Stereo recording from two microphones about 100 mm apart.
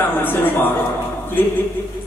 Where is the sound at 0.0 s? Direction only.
20° left (ahead or behind).